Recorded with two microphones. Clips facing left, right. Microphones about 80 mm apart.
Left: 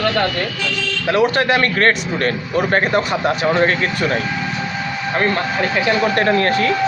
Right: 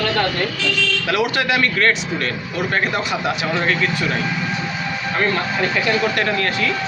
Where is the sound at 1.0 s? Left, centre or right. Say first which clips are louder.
Left 6 dB; left.